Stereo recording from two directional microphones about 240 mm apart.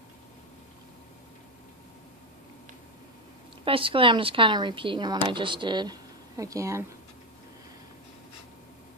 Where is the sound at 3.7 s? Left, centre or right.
Right.